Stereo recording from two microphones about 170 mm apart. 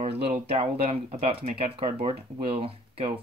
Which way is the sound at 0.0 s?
35° right (ahead or behind).